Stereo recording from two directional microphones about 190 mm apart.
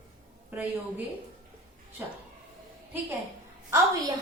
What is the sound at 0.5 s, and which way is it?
A woman's voice, 10° right (ahead or behind).